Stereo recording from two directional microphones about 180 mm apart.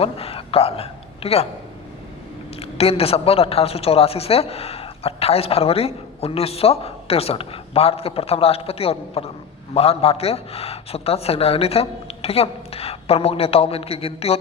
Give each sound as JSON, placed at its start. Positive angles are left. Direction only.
{"t": 0.0, "sound": "a man's voice", "side_deg": 35}
{"t": 2.6, "sound": "a woman's voice", "side_deg": 35}